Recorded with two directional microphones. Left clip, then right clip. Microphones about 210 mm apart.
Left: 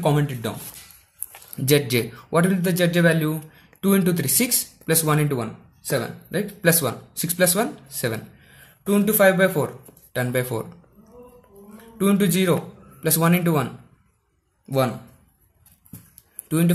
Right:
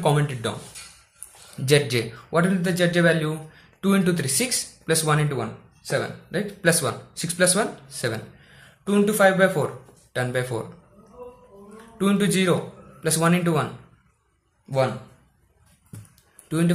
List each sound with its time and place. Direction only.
0.0 s speech: 30° left (ahead or behind)
1.6 s speech: 35° left (ahead or behind)
11.7 s a man's voice: 35° left (ahead or behind)
16.4 s speech: 35° left (ahead or behind)